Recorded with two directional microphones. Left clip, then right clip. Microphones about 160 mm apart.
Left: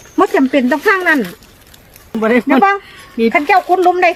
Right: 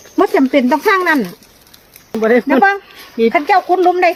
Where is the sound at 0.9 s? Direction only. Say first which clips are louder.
Even; 30° right (ahead or behind).